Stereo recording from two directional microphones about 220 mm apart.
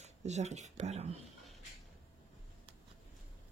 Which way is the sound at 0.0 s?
30° right (ahead or behind).